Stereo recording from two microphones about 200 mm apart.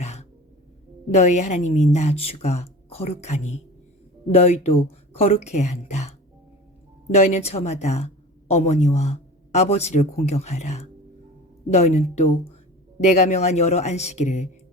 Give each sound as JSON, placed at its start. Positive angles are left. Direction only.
{"t": 0.0, "sound": "cough", "side_deg": 35}
{"t": 1.1, "sound": "a woman's voice", "side_deg": 35}